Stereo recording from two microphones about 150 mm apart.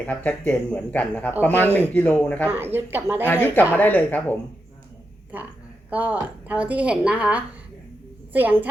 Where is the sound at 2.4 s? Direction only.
15° right (ahead or behind).